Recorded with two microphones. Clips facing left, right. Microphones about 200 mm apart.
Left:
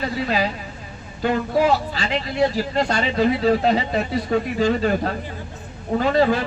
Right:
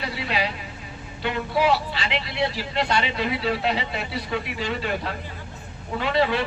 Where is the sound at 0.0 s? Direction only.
40° left (ahead or behind).